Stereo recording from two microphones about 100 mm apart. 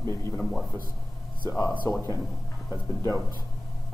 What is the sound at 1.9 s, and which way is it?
A man's voice, 30° left (ahead or behind).